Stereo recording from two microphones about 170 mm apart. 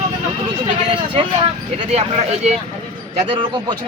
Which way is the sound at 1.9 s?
40° right (ahead or behind).